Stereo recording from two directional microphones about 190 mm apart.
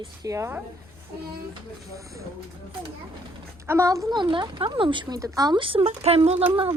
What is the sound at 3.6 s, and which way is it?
Speech, 15° right (ahead or behind).